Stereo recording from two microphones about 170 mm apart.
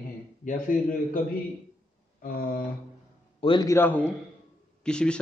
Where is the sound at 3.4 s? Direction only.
30° left (ahead or behind).